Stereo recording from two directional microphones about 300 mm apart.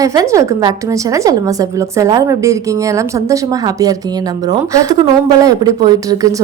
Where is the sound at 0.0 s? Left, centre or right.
Centre.